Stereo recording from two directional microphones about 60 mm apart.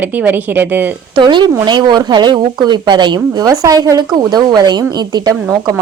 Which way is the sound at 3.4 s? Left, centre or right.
Right.